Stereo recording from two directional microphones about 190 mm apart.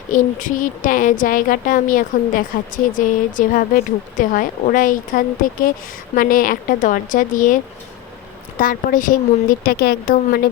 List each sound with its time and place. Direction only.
0.1 s a woman's voice: 45° left (ahead or behind)